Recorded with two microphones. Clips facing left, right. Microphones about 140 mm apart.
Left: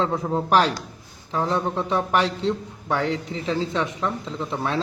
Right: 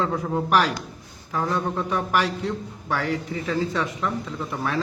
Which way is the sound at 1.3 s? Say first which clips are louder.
Left 2 dB; 20° left (ahead or behind).